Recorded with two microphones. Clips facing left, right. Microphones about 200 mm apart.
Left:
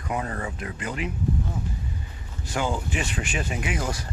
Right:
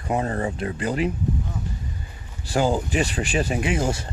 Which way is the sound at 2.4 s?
35° right (ahead or behind).